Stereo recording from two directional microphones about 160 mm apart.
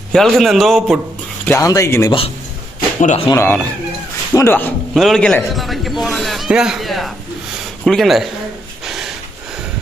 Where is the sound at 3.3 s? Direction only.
15° left (ahead or behind).